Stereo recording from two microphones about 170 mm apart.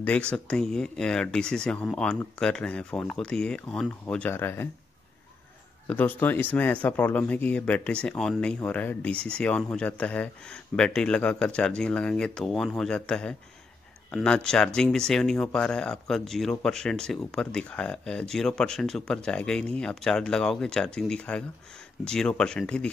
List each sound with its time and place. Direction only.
0.0 s speech: 10° left (ahead or behind)
5.9 s speech: 10° left (ahead or behind)